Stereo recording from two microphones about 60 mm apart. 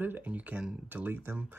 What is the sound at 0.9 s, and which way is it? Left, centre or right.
Speech, right.